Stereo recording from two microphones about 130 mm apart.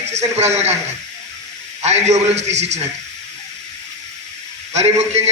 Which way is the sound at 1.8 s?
60° right (ahead or behind).